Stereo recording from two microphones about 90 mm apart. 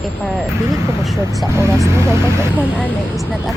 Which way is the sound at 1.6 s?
30° right (ahead or behind).